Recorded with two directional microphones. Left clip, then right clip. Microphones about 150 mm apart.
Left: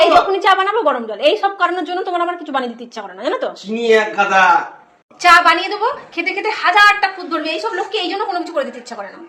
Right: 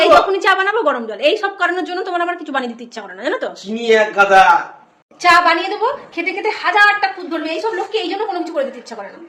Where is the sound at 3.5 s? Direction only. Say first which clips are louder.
Even; 30° right (ahead or behind).